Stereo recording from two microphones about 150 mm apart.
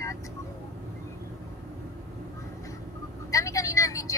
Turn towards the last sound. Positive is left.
turn(degrees=20)  # may be behind; listen again after turning